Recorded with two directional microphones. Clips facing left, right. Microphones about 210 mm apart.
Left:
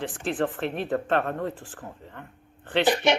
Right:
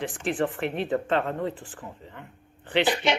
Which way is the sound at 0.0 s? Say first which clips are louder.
Even; 15° right (ahead or behind).